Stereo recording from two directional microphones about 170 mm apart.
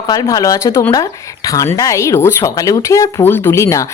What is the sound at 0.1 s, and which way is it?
A woman's voice, 20° left (ahead or behind).